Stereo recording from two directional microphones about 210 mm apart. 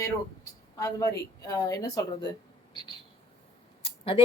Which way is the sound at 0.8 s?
15° left (ahead or behind).